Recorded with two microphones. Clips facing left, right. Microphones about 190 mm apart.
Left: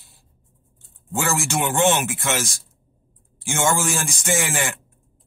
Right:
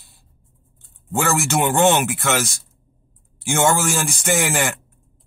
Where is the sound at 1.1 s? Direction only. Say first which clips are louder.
Right 4 dB; 60° right (ahead or behind).